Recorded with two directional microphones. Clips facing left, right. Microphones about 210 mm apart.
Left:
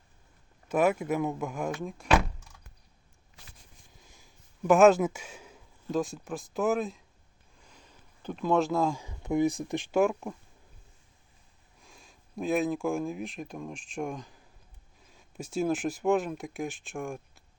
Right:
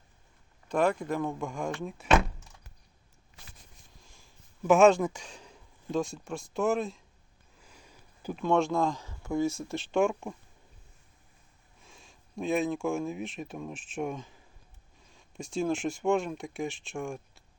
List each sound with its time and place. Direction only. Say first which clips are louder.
0.7 s speech: left 2 dB; 5° left (ahead or behind)
4.0 s speech: left 1 dB; centre (ahead or behind)
11.8 s speech: even; centre (ahead or behind)